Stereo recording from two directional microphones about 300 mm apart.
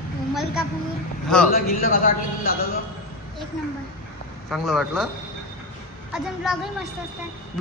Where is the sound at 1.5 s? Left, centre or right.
Left.